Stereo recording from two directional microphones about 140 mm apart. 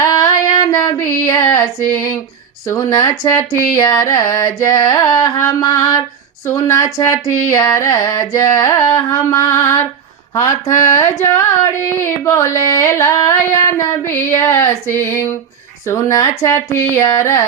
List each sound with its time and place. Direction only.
0.0 s female singing: 25° left (ahead or behind)
0.7 s child singing: 20° left (ahead or behind)
2.6 s carnatic music: 25° left (ahead or behind)